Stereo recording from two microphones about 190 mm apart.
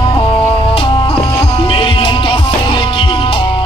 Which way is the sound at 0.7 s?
30° left (ahead or behind).